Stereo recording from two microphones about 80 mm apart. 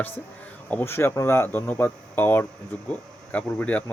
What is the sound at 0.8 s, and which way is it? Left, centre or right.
Speech, left.